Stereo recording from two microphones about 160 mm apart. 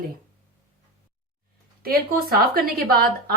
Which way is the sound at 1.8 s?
65° right (ahead or behind).